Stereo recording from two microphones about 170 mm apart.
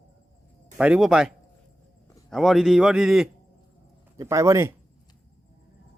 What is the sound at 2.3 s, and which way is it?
Speech, centre (ahead or behind).